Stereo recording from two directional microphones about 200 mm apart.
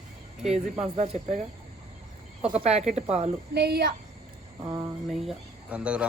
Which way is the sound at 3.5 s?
55° right (ahead or behind).